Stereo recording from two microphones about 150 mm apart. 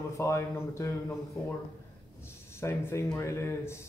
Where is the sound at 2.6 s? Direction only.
20° left (ahead or behind).